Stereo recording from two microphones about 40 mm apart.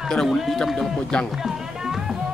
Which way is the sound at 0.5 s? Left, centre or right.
Centre.